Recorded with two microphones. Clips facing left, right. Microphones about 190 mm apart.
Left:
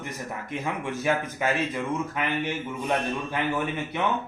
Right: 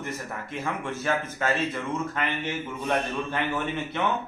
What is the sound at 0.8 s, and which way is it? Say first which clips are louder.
Speech: left 3 dB; 15° left (ahead or behind).